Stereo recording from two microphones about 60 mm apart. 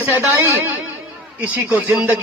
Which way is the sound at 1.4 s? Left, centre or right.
Right.